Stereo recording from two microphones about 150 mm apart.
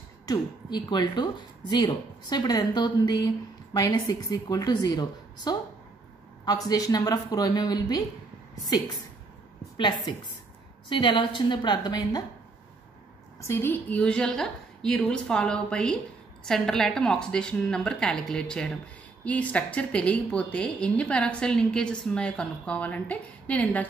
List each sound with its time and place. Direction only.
0.3 s speech: 30° left (ahead or behind)
10.9 s a woman's voice: 30° left (ahead or behind)
13.4 s a woman's voice: 15° left (ahead or behind)